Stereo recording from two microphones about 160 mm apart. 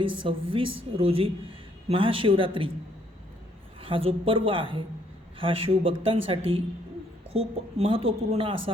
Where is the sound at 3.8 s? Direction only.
35° right (ahead or behind).